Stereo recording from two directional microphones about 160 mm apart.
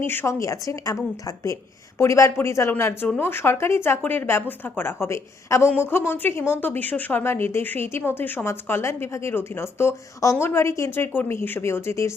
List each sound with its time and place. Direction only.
0.0 s a woman's voice: 15° left (ahead or behind)
2.0 s a woman's voice: 15° left (ahead or behind)